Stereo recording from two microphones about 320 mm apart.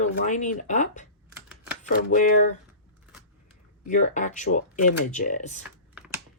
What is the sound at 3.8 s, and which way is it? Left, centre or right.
Speech, left.